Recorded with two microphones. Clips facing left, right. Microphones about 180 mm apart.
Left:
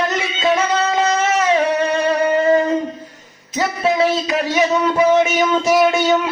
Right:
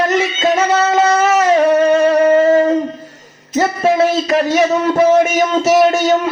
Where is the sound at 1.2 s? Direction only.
40° right (ahead or behind).